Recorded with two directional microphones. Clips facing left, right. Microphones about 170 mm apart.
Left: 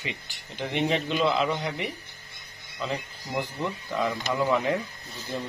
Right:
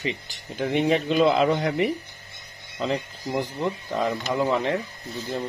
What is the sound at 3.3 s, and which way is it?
Speech, 35° right (ahead or behind).